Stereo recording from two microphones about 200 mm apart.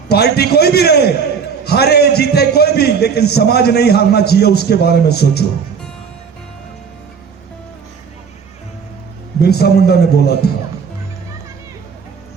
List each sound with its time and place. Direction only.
0.1 s a sound: 55° left (ahead or behind)
1.6 s a man's voice: 55° left (ahead or behind)
9.4 s a man's voice: 55° left (ahead or behind)